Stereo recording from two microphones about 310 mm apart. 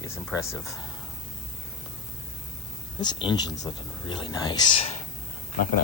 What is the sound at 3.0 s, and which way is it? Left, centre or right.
Speech, centre.